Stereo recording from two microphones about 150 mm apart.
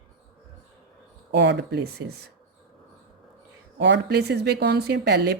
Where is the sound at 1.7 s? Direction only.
90° right.